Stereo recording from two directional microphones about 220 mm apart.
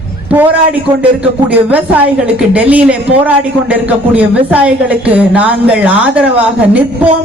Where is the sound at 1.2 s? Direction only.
5° right (ahead or behind).